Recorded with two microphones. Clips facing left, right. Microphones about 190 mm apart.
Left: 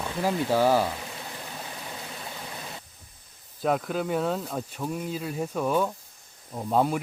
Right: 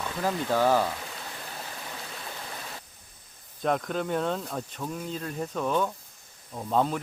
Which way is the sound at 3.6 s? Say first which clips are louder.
Left 1 dB; 5° left (ahead or behind).